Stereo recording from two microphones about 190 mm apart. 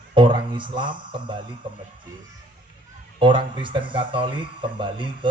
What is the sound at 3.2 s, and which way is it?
A man's voice, 25° right (ahead or behind).